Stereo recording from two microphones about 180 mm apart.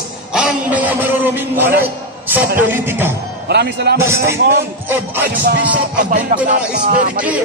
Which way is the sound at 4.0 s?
15° right (ahead or behind).